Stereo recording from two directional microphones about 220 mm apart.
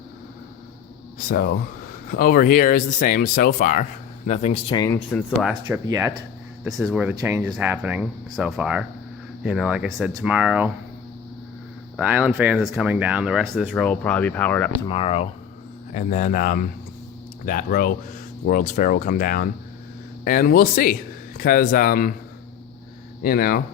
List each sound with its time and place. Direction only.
1.2 s a man's voice: 40° left (ahead or behind); by 4.9 s 15° left (ahead or behind)
5.1 s speech: centre (ahead or behind)
6.7 s speech: centre (ahead or behind)
11.9 s speech: 5° right (ahead or behind)
14.8 s a man's voice: 25° left (ahead or behind)
23.2 s a man's voice: 40° left (ahead or behind)